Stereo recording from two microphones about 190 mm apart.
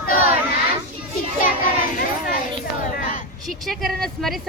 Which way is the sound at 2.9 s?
45° left (ahead or behind).